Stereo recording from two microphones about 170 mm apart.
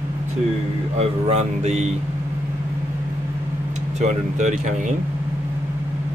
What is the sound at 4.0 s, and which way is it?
Speech, 45° right (ahead or behind).